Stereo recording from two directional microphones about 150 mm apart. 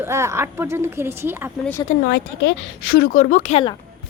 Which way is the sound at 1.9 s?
55° left (ahead or behind).